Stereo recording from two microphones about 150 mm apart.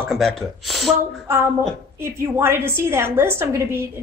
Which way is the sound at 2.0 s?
15° right (ahead or behind).